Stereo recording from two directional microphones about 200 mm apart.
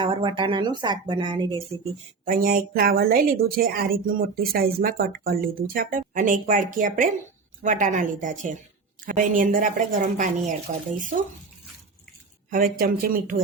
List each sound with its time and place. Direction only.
0.0 s speech: 25° right (ahead or behind)
2.2 s a woman's voice: 45° right (ahead or behind)
12.5 s a woman's voice: 45° right (ahead or behind)